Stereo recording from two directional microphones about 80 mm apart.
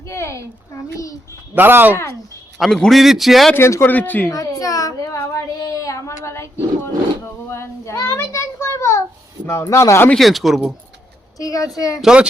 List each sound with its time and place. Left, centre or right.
0.0 s a sound: left
0.9 s a child's voice: left
1.5 s speech: right
2.6 s a man's voice: centre
3.8 s speech: left
4.3 s a sound: left
5.1 s child singing: left
8.1 s a sound: left
9.6 s speech: left
10.2 s a man's voice: centre
11.3 s a child's voice: left
12.0 s speech: centre